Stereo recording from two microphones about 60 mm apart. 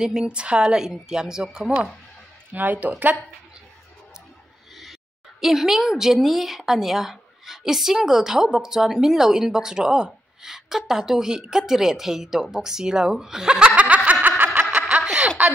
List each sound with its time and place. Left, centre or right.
0.0 s a woman's voice: centre
2.5 s speech: right
5.4 s a woman's voice: centre; by 14.1 s right
14.2 s snicker: right
15.1 s a sound: right